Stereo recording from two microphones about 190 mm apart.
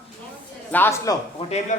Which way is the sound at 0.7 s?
15° left (ahead or behind).